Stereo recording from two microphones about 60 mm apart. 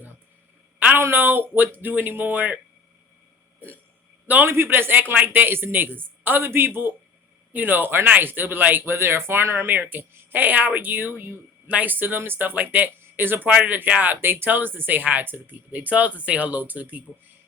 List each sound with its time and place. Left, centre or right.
0.9 s speech: right
4.4 s speech: right
13.5 s speech: centre